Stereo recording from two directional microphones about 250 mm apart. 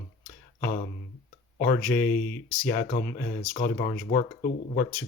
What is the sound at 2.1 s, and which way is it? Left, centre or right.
Speech, centre.